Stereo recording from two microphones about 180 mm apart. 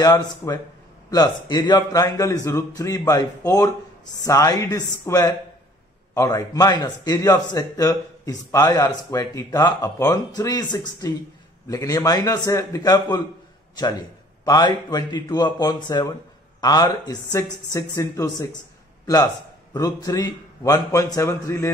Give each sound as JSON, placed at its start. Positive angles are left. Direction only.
{"t": 0.0, "sound": "a man's voice", "side_deg": 20}
{"t": 19.7, "sound": "a man's voice", "side_deg": 20}